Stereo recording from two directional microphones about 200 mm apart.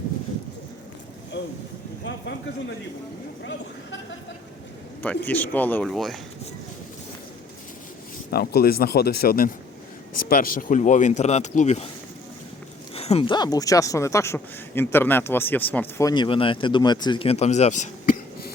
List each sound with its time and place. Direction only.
1.3 s vehicle: 65° left (ahead or behind)
2.0 s speech: 60° left (ahead or behind)
5.0 s speech: 10° left (ahead or behind)
8.3 s speech: 50° left (ahead or behind); by 11.9 s 35° left (ahead or behind)
12.9 s speech: 30° left (ahead or behind)